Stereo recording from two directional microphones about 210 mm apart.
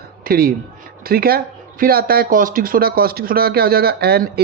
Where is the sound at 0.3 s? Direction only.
45° right (ahead or behind).